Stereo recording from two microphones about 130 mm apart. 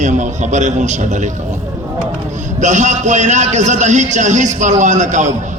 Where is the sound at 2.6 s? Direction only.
70° right (ahead or behind).